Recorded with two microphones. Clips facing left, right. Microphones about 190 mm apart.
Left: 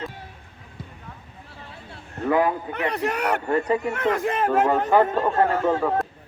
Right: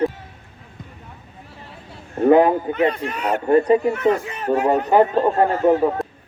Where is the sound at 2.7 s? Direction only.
70° left (ahead or behind).